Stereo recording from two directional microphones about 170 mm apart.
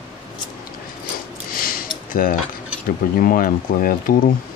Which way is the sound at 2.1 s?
55° left (ahead or behind).